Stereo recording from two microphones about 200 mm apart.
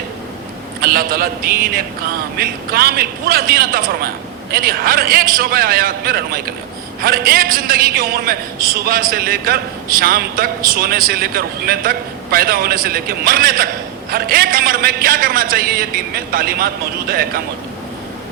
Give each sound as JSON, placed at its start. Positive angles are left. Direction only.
{"t": 0.8, "sound": "a man's voice", "side_deg": -50}